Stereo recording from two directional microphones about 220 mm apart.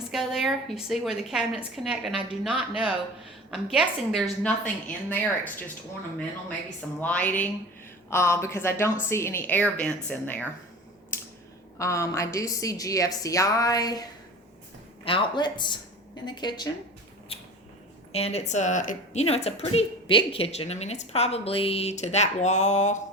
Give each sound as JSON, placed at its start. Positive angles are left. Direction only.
{"t": 0.1, "sound": "a woman's voice", "side_deg": 0}
{"t": 7.0, "sound": "a woman's voice", "side_deg": 5}
{"t": 11.8, "sound": "a woman's voice", "side_deg": 15}
{"t": 18.1, "sound": "a woman's voice", "side_deg": 30}